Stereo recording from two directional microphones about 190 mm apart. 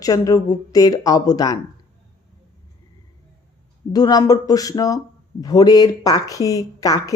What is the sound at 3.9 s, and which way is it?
A woman's voice, 20° left (ahead or behind).